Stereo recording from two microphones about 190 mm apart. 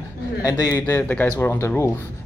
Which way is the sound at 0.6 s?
10° left (ahead or behind).